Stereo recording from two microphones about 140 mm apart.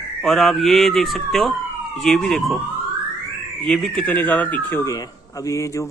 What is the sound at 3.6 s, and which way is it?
A man's voice, 5° left (ahead or behind).